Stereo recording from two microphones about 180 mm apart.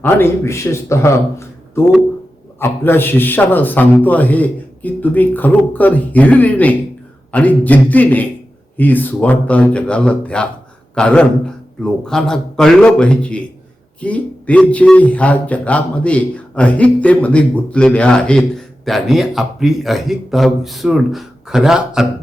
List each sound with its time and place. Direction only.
0.0 s a man's voice: 15° left (ahead or behind); by 22.0 s 5° right (ahead or behind)